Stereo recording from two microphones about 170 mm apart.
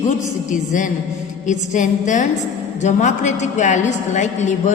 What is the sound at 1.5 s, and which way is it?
A woman's voice, 45° left (ahead or behind).